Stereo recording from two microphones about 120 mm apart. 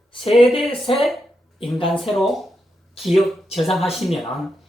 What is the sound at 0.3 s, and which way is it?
Speech, centre (ahead or behind).